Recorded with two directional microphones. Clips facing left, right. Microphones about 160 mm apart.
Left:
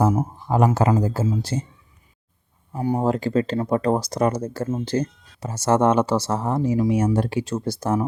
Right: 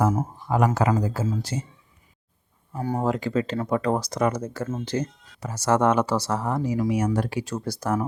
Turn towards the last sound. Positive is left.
turn(degrees=25)  # may be behind; listen again after turning